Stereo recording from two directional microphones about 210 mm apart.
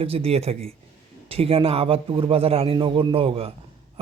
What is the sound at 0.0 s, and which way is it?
A man's voice, 30° right (ahead or behind).